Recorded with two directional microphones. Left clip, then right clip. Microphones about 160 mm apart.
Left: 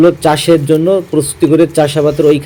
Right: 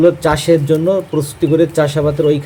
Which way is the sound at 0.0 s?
15° left (ahead or behind).